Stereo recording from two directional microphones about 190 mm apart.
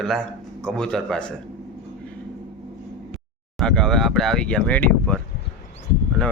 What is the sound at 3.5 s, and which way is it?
Speech, 5° left (ahead or behind).